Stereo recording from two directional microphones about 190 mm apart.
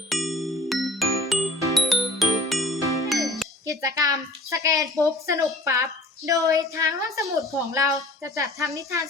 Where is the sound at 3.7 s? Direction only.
15° right (ahead or behind).